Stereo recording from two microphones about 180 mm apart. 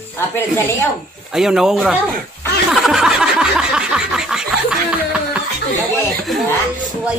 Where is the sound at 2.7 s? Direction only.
5° right (ahead or behind).